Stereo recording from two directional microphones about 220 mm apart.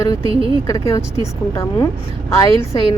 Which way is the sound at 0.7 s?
15° left (ahead or behind).